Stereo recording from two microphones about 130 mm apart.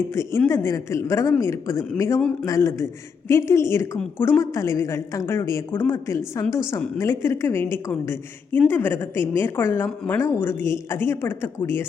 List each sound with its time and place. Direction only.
0.1 s a woman's voice: 20° left (ahead or behind)